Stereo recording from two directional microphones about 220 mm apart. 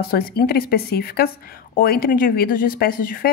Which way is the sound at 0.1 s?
45° left (ahead or behind).